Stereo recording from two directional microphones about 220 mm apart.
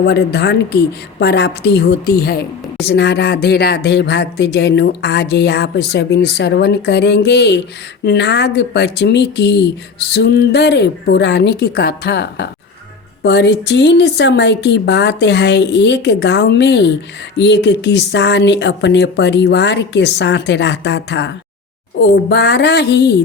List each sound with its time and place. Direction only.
0.0 s speech: 50° left (ahead or behind)